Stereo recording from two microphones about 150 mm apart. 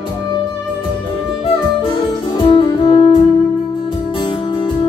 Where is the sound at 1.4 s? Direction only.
35° left (ahead or behind).